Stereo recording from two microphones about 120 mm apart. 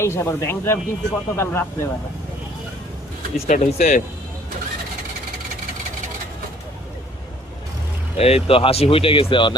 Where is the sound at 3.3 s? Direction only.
75° left (ahead or behind).